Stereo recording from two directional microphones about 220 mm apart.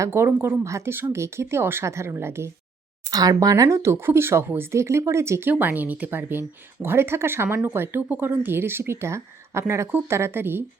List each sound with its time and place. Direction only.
0.0 s speech: 10° right (ahead or behind)